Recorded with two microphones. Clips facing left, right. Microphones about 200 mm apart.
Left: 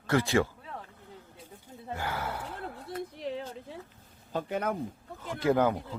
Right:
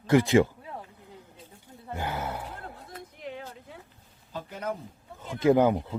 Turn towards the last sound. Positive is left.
turn(degrees=-20)  # may be behind; listen again after turning